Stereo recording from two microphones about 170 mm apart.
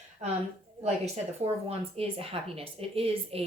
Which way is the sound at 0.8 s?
40° right (ahead or behind).